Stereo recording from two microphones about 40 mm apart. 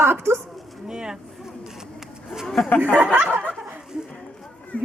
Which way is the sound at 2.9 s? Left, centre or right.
Right.